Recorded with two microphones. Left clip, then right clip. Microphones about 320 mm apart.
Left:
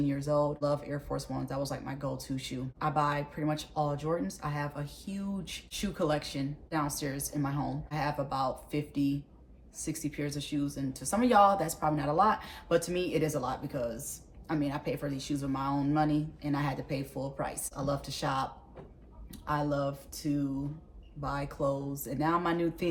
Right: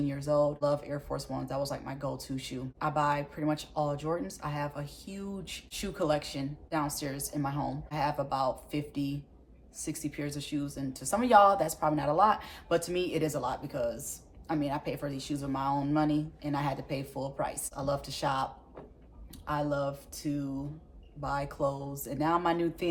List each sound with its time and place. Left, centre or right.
0.0 s speech: centre
19.5 s speech: centre